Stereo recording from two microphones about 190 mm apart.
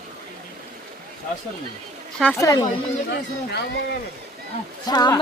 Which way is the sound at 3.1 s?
60° left (ahead or behind).